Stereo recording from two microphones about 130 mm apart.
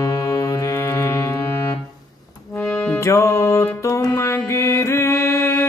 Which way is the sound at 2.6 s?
10° left (ahead or behind).